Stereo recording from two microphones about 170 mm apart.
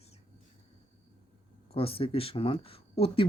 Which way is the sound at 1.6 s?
35° left (ahead or behind).